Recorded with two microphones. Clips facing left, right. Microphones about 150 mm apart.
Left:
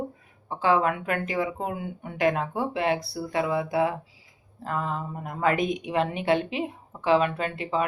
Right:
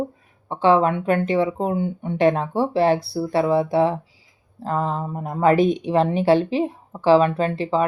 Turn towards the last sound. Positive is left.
turn(degrees=-30)  # may be behind; listen again after turning